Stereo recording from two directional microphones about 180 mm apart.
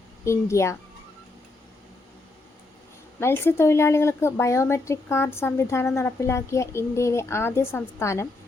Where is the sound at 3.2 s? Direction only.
15° left (ahead or behind).